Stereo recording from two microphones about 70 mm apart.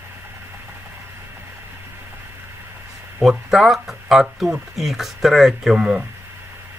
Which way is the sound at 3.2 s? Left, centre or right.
Centre.